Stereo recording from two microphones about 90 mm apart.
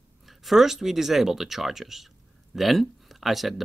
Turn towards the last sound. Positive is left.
turn(degrees=0)  # may be behind; listen again after turning